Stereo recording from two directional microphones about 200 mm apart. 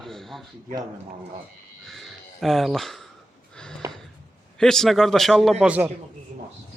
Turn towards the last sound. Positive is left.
turn(degrees=-5)  # may be behind; listen again after turning